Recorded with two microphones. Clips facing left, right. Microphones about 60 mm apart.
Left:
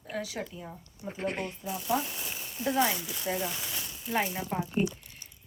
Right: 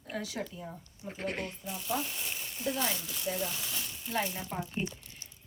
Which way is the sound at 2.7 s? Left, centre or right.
Centre.